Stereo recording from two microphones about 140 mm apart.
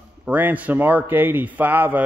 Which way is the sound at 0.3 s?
10° right (ahead or behind).